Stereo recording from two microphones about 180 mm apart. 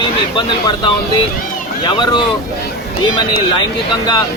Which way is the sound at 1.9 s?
25° left (ahead or behind).